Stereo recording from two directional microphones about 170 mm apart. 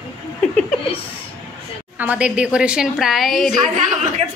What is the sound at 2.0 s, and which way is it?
A man's voice, 10° right (ahead or behind).